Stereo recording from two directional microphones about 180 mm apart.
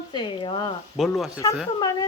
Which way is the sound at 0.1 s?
25° left (ahead or behind).